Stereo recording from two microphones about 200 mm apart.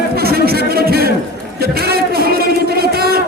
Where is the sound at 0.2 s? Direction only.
50° right (ahead or behind).